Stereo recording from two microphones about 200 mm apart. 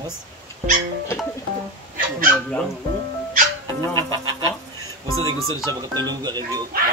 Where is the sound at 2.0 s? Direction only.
45° right (ahead or behind).